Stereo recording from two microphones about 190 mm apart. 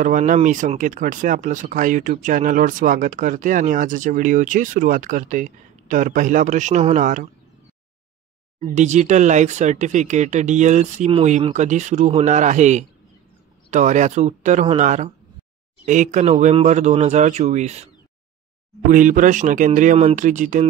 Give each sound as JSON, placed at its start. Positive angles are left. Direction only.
{"t": 0.0, "sound": "speech", "side_deg": -40}
{"t": 8.5, "sound": "speech", "side_deg": -40}
{"t": 18.9, "sound": "speech", "side_deg": -45}